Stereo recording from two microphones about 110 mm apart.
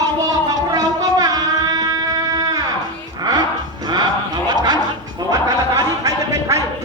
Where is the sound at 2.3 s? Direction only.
35° right (ahead or behind).